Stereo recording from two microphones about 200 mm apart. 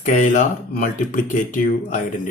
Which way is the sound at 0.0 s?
40° left (ahead or behind).